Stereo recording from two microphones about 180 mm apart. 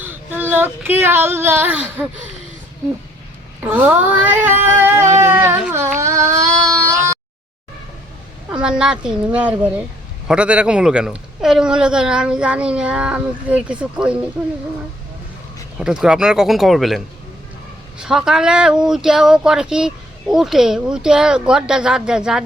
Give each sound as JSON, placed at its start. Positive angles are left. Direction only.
{"t": 0.0, "sound": "speech", "side_deg": -10}
{"t": 3.6, "sound": "cat", "side_deg": -10}
{"t": 6.0, "sound": "a sound", "side_deg": -15}
{"t": 8.4, "sound": "cat", "side_deg": -5}
{"t": 10.2, "sound": "speech", "side_deg": -5}
{"t": 15.8, "sound": "speech", "side_deg": -5}